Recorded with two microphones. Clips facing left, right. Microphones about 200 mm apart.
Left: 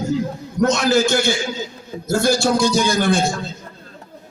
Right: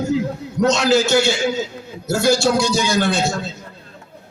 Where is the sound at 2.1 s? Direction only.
55° left (ahead or behind).